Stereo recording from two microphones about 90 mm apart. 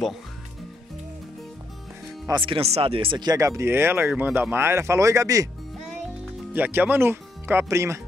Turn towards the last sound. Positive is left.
turn(degrees=-35)  # may be behind; listen again after turning